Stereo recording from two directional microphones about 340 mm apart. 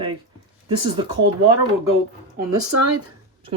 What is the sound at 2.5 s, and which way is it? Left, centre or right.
Speech, right.